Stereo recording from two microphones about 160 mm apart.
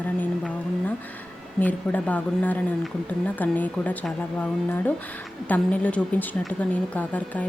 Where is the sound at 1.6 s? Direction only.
10° left (ahead or behind).